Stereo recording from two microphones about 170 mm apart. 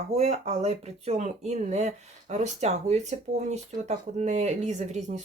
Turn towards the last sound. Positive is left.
turn(degrees=-45)  # may be behind; listen again after turning